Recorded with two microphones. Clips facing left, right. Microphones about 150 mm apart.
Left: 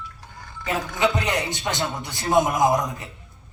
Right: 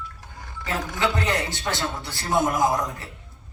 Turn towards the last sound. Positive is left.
turn(degrees=20)  # may be behind; listen again after turning